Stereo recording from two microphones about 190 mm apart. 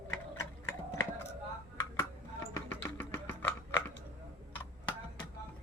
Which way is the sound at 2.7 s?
10° left (ahead or behind).